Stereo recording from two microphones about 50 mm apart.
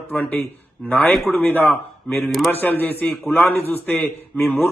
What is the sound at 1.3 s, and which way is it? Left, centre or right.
Speech, left.